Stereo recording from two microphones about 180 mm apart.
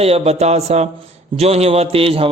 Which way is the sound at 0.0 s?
35° right (ahead or behind).